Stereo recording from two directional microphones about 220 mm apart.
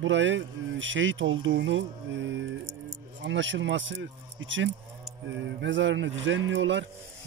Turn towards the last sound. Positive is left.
turn(degrees=-55)  # may be behind; listen again after turning